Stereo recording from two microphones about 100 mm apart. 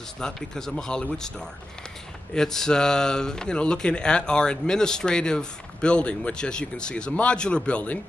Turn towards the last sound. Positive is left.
turn(degrees=10)  # may be behind; listen again after turning